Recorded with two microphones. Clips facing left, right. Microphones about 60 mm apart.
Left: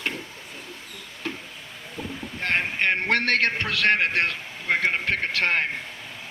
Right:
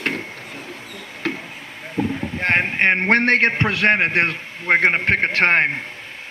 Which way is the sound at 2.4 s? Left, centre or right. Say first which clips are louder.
Right 6 dB; right.